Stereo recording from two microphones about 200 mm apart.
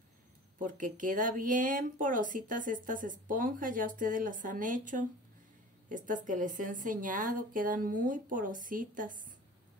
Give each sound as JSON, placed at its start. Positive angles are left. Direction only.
{"t": 0.6, "sound": "speech", "side_deg": -40}